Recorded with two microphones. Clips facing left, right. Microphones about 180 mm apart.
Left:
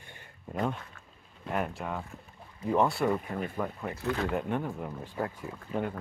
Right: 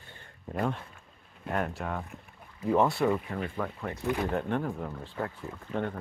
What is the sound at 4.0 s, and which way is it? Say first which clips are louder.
Speech: right 1 dB; 15° right (ahead or behind).